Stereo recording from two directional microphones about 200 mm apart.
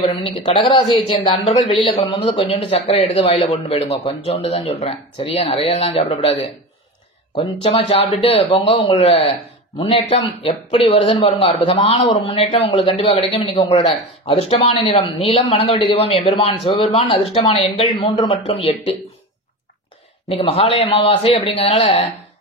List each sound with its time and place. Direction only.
0.5 s speech: 30° left (ahead or behind)
1.6 s a man's voice: centre (ahead or behind)
2.0 s speech: 30° left (ahead or behind)
7.3 s a man's voice: 30° left (ahead or behind)
20.9 s a man's voice: 30° left (ahead or behind)